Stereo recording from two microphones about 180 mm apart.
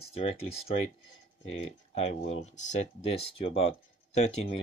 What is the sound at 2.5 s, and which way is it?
Speech, 40° left (ahead or behind).